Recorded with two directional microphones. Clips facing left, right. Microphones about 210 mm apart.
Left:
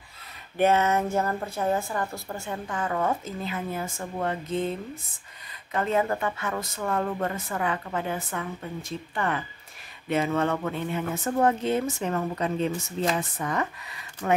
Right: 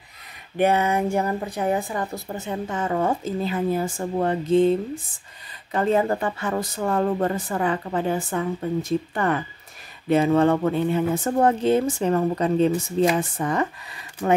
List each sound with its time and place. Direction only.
0.6 s speech: 15° right (ahead or behind); by 8.5 s 30° right (ahead or behind)
9.1 s speech: 40° right (ahead or behind)